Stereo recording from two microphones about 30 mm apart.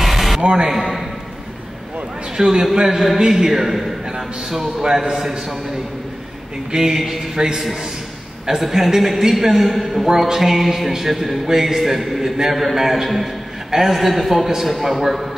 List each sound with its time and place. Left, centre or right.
0.0 s music: centre
0.4 s a man's voice: right
2.3 s a man's voice: centre
2.7 s a sound: right
3.4 s a man's voice: centre
5.1 s a sound: centre
6.7 s a sound: centre
8.5 s a man's voice: centre
13.9 s a man's voice: centre